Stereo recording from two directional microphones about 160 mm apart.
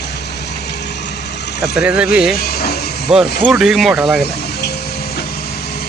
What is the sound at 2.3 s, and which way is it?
Vehicle, 75° left (ahead or behind).